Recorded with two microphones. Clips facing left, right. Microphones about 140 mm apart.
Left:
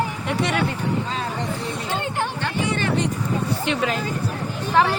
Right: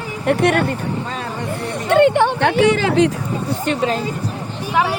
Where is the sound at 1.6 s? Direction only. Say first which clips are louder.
Right 13 dB; 65° right (ahead or behind); by 3.0 s 90° right.